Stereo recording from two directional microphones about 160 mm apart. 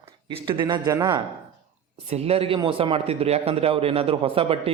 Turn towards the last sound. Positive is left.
turn(degrees=-35)  # may be behind; listen again after turning